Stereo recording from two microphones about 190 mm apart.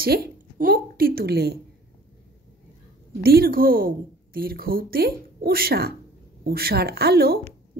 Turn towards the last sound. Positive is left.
turn(degrees=-55)  # may be behind; listen again after turning